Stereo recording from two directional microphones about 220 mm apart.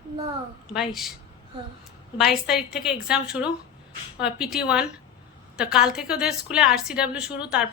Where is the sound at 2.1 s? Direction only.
Centre (ahead or behind).